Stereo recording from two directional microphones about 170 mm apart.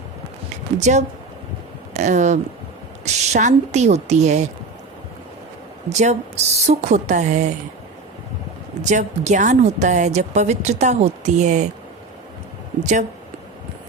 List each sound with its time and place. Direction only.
0.8 s a woman's voice: 45° right (ahead or behind)
5.9 s a woman's voice: 40° right (ahead or behind)
8.8 s a woman's voice: 45° right (ahead or behind)
12.8 s a woman's voice: 45° right (ahead or behind)